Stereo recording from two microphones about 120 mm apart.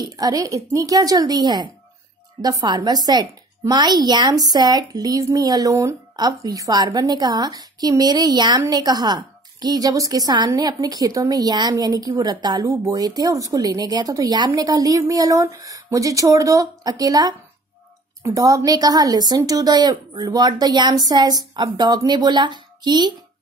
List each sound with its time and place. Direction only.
0.0 s a woman's voice: 30° right (ahead or behind)